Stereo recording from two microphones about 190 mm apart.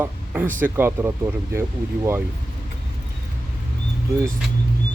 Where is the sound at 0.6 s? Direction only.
10° right (ahead or behind).